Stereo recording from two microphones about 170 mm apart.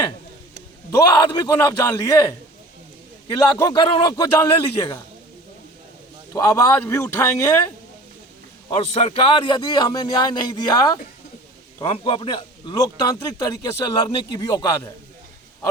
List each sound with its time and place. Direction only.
0.9 s a man's voice: 20° left (ahead or behind)
3.2 s a man's voice: 20° left (ahead or behind)
6.3 s a man's voice: 20° left (ahead or behind)
8.7 s a man's voice: 40° left (ahead or behind); by 14.9 s 20° left (ahead or behind)